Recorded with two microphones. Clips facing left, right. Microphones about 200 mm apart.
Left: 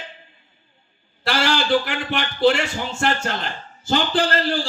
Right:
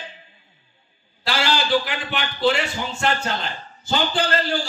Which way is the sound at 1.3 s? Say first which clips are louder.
Left 2 dB; 50° left (ahead or behind).